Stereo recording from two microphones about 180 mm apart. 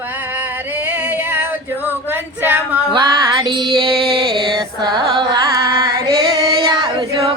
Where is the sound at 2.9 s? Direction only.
25° right (ahead or behind).